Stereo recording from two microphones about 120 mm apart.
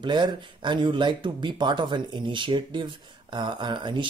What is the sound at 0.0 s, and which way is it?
Speech, 40° right (ahead or behind).